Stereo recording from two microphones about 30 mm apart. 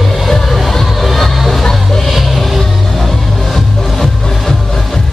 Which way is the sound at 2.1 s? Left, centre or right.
Centre.